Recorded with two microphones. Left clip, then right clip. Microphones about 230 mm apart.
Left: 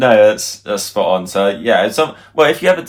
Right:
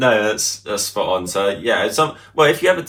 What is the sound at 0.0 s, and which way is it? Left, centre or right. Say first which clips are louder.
Speech: left 6 dB; left.